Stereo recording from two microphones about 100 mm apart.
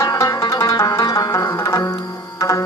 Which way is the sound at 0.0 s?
35° left (ahead or behind).